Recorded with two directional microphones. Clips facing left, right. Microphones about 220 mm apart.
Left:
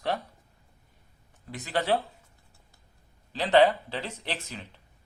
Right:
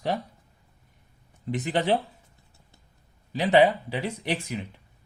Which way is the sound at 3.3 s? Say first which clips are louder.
Right 1 dB; 10° right (ahead or behind).